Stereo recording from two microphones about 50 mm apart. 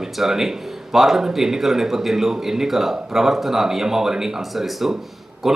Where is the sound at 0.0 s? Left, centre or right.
Centre.